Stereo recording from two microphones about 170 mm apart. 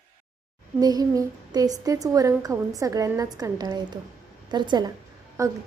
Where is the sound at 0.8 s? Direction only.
20° right (ahead or behind).